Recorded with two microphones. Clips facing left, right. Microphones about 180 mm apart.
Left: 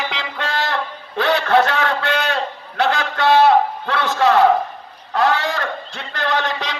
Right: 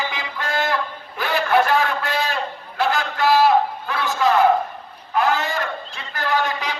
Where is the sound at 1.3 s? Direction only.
75° left (ahead or behind).